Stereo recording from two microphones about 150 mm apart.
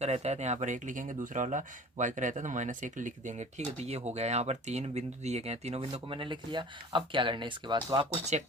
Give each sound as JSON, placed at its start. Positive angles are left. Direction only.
{"t": 0.0, "sound": "speech", "side_deg": -45}
{"t": 8.3, "sound": "speech", "side_deg": -50}